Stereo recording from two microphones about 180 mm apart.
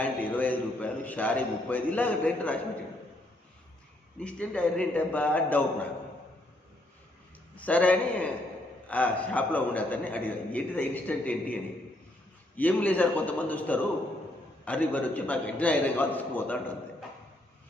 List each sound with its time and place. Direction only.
0.0 s a man's voice: 10° left (ahead or behind)
4.2 s a man's voice: 5° left (ahead or behind)
7.5 s a man's voice: 10° left (ahead or behind)
12.5 s a man's voice: 10° left (ahead or behind)